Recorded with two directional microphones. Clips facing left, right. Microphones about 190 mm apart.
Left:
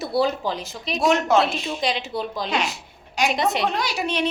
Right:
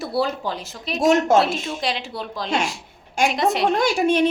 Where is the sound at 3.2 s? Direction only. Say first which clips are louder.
Right 2 dB; 50° right (ahead or behind).